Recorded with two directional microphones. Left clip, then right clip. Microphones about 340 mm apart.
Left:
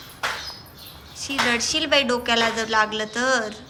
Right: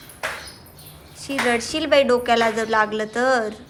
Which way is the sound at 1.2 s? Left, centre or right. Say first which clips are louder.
Right 1 dB; centre.